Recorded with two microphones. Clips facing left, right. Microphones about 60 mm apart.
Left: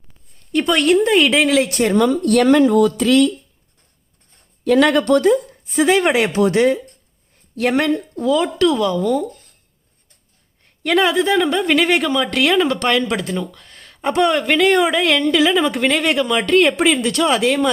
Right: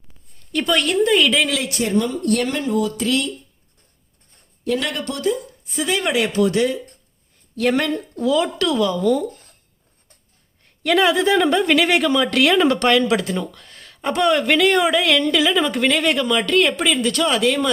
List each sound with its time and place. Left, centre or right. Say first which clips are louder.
0.5 s a woman's voice: left 3 dB; centre
0.9 s speech: left 2 dB; left
1.8 s speech: left 5 dB; left
4.7 s speech: left 10 dB; left
5.7 s speech: left 6 dB; left
7.7 s speech: left 3 dB; left
7.9 s speech: left 1 dB; centre
10.8 s a woman's voice: left 1 dB; centre
12.5 s speech: right 1 dB; centre
12.9 s speech: right 1 dB; centre
15.0 s a woman's voice: left 2 dB; centre